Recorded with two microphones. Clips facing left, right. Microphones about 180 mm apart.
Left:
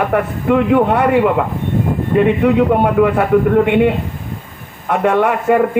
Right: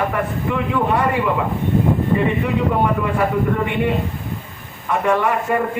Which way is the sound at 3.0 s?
65° left (ahead or behind).